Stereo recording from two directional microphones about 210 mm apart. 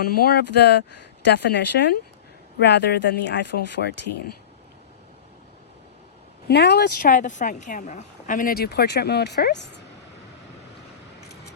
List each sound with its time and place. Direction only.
0.0 s a woman's voice: 50° left (ahead or behind)
6.5 s a woman's voice: 50° left (ahead or behind)